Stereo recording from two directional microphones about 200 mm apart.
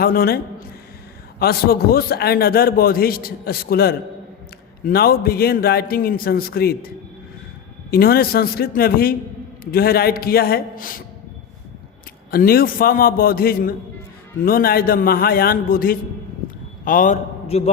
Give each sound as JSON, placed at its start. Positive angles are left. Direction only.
{"t": 0.0, "sound": "a man's voice", "side_deg": 50}
{"t": 1.4, "sound": "a man's voice", "side_deg": 50}
{"t": 12.3, "sound": "a man's voice", "side_deg": 50}